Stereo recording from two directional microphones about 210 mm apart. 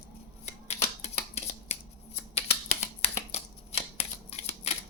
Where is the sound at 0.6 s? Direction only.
30° left (ahead or behind).